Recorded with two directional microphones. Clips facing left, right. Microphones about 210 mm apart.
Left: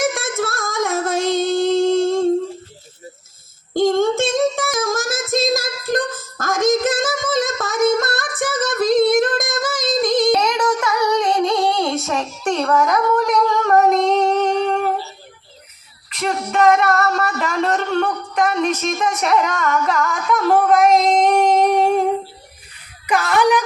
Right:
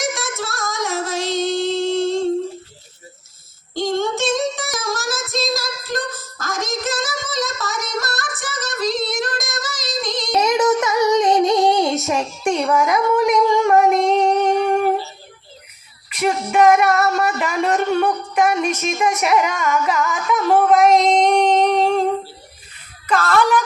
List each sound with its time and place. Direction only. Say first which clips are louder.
0.0 s female singing: left 4 dB; 55° left (ahead or behind)
3.8 s child singing: left 5 dB; 50° left (ahead or behind)
10.4 s child singing: right 3 dB; 20° right (ahead or behind)
16.0 s a sound: right 2 dB; 10° right (ahead or behind); by 23.6 s 15° left (ahead or behind)